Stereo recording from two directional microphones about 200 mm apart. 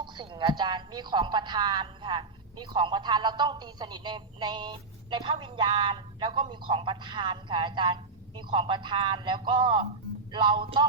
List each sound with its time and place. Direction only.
0.0 s speech: 25° right (ahead or behind)